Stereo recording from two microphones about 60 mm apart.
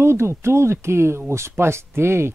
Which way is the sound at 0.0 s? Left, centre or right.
Right.